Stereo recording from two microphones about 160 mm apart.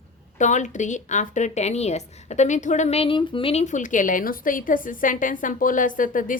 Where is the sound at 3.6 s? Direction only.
50° left (ahead or behind).